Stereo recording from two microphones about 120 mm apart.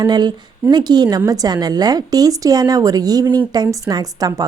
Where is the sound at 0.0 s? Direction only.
35° right (ahead or behind).